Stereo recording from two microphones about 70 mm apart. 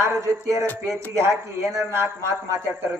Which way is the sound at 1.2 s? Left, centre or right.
Right.